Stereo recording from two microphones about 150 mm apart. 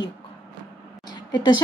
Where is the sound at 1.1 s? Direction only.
30° left (ahead or behind).